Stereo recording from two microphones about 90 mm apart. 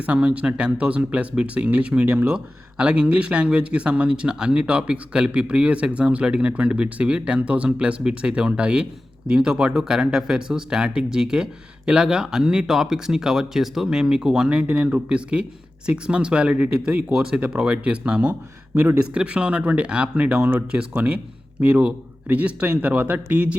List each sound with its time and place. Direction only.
0.0 s speech: 15° right (ahead or behind)